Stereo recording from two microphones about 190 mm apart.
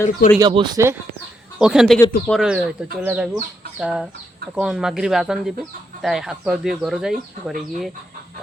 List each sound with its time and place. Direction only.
0.3 s speech: 20° right (ahead or behind)
1.5 s speech: 5° right (ahead or behind)